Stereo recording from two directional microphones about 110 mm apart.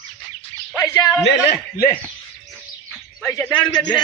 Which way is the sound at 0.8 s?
35° left (ahead or behind).